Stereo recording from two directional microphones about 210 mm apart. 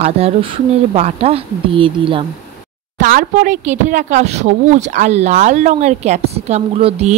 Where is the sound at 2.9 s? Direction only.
40° right (ahead or behind).